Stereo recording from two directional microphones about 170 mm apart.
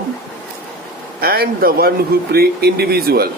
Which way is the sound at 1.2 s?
60° right (ahead or behind).